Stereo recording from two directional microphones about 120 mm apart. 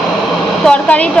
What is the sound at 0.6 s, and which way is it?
Speech, 10° left (ahead or behind).